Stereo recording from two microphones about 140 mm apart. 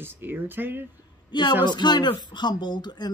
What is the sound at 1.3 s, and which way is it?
Speech, 30° left (ahead or behind).